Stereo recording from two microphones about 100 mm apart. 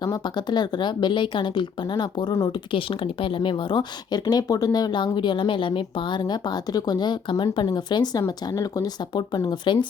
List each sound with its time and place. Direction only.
0.0 s speech: 45° left (ahead or behind)
2.7 s speech: 60° left (ahead or behind)